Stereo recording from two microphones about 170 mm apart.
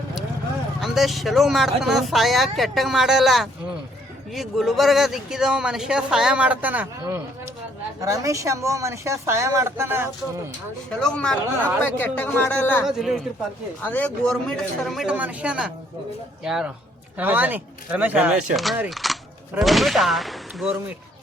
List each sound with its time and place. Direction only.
0.8 s speech: centre (ahead or behind)
11.0 s speech: 5° left (ahead or behind)
12.8 s speech: 5° right (ahead or behind)
13.8 s speech: 10° left (ahead or behind)